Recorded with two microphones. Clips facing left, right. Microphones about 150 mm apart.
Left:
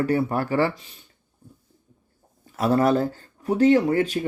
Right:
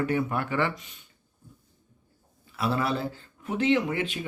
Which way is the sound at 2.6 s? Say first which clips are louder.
Left 8 dB; 45° left (ahead or behind).